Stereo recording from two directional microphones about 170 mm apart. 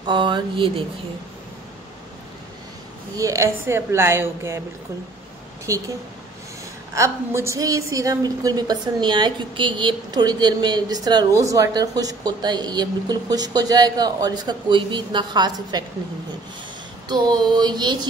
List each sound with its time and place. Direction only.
0.0 s a woman's voice: 30° right (ahead or behind)
3.2 s a woman's voice: 20° right (ahead or behind)
5.7 s a woman's voice: 20° right (ahead or behind)
7.0 s a woman's voice: 15° right (ahead or behind)
17.1 s a woman's voice: 25° right (ahead or behind)